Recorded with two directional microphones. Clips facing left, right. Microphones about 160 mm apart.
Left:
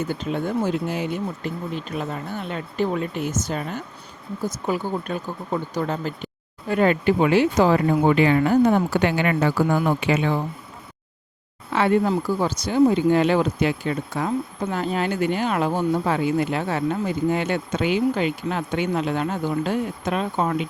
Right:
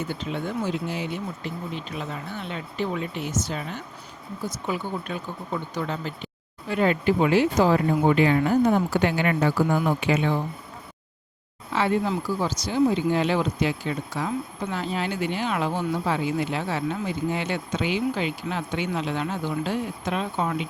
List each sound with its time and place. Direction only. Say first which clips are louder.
0.1 s speech: left 5 dB; 45° left (ahead or behind); by 9.5 s 75° left (ahead or behind)
11.7 s speech: left 4 dB; 55° left (ahead or behind)